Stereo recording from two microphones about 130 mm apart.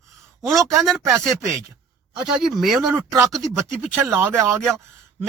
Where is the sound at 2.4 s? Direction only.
Centre (ahead or behind).